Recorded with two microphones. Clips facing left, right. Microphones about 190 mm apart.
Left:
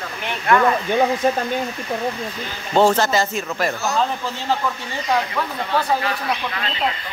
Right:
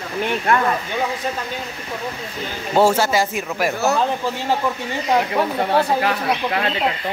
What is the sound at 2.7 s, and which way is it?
Speech, 10° right (ahead or behind).